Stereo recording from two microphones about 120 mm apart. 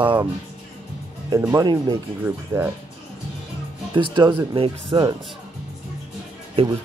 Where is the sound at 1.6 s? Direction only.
35° right (ahead or behind).